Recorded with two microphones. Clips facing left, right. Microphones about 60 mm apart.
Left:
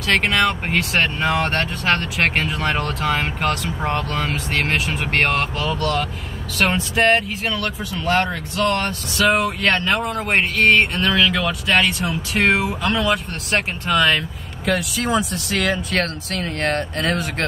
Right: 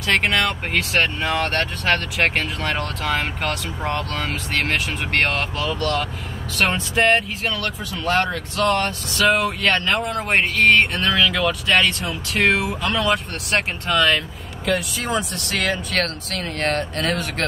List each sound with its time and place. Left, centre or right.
0.1 s speech: centre
1.2 s speech: centre
1.5 s speech: centre